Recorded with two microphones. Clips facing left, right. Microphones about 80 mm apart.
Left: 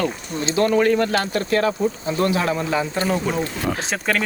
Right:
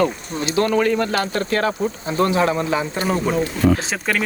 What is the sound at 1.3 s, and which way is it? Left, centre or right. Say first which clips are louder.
Speech: left 1 dB; right.